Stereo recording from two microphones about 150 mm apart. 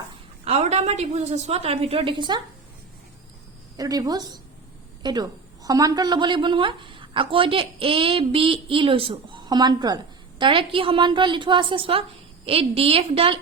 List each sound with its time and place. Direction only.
0.4 s a woman's voice: 45° right (ahead or behind)
3.8 s a woman's voice: 25° right (ahead or behind)